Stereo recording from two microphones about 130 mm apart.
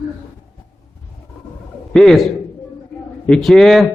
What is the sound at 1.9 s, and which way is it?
A man's voice, 5° left (ahead or behind).